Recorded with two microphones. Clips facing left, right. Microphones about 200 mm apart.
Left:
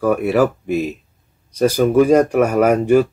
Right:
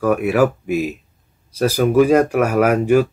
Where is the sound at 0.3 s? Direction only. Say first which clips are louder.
Even; 10° right (ahead or behind).